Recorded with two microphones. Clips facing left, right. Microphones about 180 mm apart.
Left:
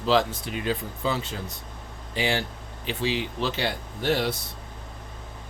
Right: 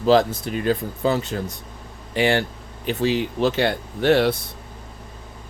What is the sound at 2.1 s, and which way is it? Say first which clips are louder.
Speech: right 7 dB; 60° right (ahead or behind).